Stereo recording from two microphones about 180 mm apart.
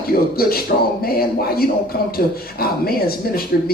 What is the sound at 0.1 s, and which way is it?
A man's voice, 55° left (ahead or behind).